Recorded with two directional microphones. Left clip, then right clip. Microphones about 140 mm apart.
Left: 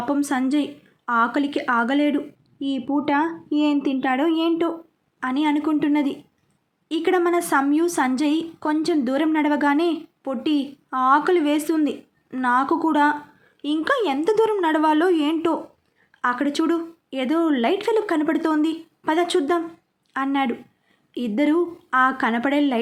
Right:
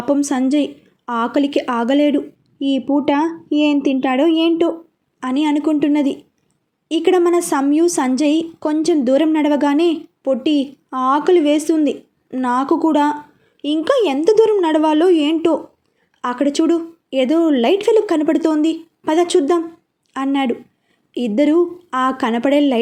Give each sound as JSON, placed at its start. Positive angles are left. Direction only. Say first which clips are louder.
{"t": 0.0, "sound": "a woman's voice", "louder": "right 5 dB", "side_deg": -15}